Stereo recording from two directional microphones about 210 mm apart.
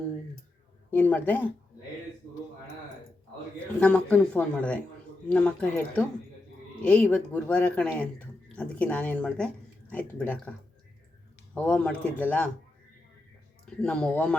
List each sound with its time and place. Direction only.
0.9 s speech: 10° left (ahead or behind)
3.8 s speech: 5° left (ahead or behind)
11.5 s speech: 5° left (ahead or behind)
13.8 s speech: 5° left (ahead or behind)